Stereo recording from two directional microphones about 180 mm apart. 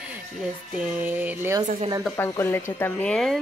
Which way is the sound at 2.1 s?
15° left (ahead or behind).